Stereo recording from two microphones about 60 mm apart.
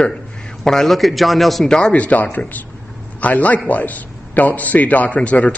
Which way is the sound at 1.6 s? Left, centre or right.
Centre.